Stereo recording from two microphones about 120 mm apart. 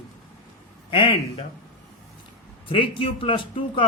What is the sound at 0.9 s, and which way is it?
Speech, 50° left (ahead or behind).